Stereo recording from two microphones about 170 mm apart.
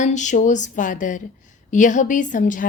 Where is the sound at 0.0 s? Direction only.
45° left (ahead or behind).